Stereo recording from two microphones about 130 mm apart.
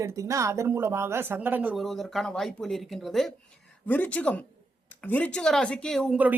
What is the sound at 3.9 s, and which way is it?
Speech, 10° left (ahead or behind).